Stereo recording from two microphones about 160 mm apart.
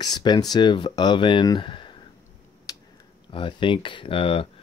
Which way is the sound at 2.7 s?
20° left (ahead or behind).